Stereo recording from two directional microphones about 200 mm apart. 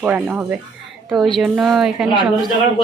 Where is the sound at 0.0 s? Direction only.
5° right (ahead or behind).